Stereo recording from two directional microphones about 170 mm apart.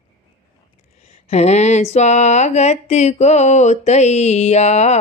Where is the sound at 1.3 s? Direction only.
40° left (ahead or behind).